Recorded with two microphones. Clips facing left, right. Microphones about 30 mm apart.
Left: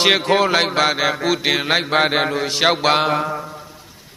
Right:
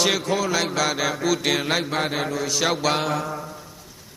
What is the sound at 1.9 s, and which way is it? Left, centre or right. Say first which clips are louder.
Mantra: left 7 dB; left.